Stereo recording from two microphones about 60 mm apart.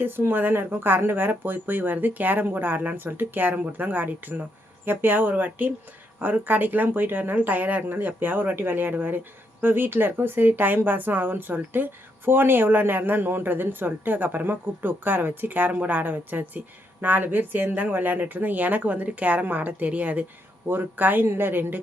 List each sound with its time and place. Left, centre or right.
0.0 s speech: right